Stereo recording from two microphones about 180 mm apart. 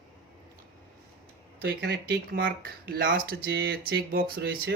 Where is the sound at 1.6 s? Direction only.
60° right (ahead or behind).